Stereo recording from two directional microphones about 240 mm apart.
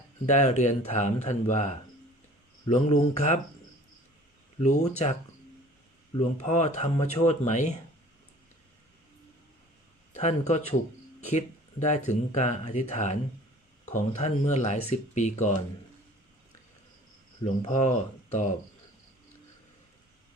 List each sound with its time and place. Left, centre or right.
0.3 s speech: left
6.1 s speech: left
10.1 s a man's voice: left
17.4 s speech: left